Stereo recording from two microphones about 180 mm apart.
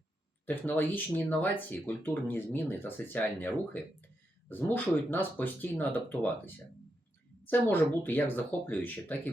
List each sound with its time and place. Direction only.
0.4 s a woman's voice: 10° left (ahead or behind)